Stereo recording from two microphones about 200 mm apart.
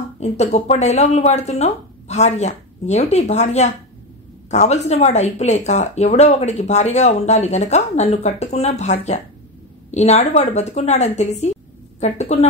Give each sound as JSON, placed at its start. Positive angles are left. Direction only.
{"t": 0.2, "sound": "speech", "side_deg": 35}